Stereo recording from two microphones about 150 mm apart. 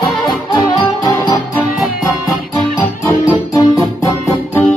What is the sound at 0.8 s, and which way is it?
Music, 25° left (ahead or behind).